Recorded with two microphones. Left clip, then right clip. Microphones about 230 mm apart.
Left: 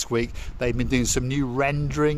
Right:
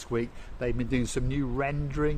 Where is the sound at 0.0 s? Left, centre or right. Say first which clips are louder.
Left 6 dB; left.